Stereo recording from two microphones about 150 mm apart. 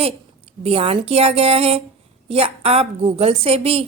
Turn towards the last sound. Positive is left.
turn(degrees=-40)  # may be behind; listen again after turning